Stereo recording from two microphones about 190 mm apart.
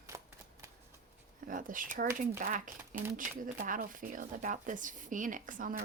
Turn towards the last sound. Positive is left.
turn(degrees=-45)  # may be behind; listen again after turning